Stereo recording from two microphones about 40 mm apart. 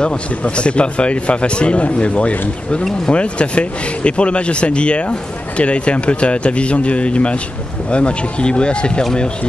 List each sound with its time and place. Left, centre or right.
0.0 s speech: left